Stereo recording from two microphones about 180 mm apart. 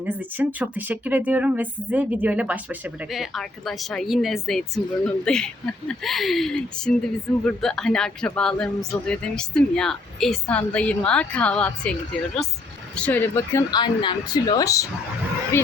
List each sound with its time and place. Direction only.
0.0 s speech: 10° right (ahead or behind); by 15.7 s 15° left (ahead or behind)